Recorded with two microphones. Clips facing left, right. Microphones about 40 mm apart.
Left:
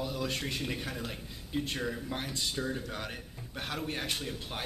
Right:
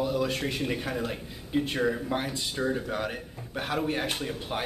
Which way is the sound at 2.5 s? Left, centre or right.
Centre.